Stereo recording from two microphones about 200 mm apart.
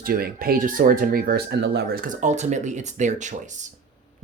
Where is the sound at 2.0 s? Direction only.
35° right (ahead or behind).